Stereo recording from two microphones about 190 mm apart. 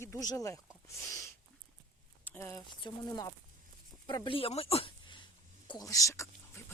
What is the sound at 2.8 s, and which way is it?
Speech, 20° left (ahead or behind).